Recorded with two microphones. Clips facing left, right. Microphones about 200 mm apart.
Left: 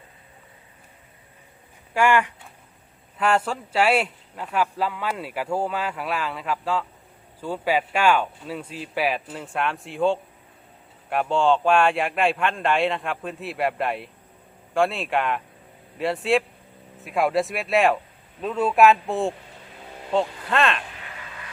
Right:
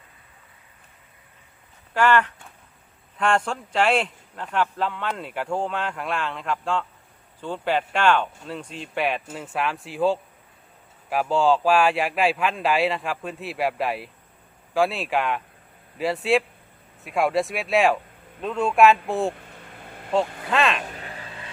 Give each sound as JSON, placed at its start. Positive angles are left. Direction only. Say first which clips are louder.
{"t": 1.9, "sound": "speech", "louder": "even", "side_deg": 10}
{"t": 20.8, "sound": "vehicle", "louder": "right 4 dB", "side_deg": -40}